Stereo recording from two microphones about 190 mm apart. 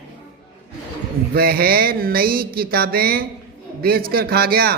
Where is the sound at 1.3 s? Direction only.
55° right (ahead or behind).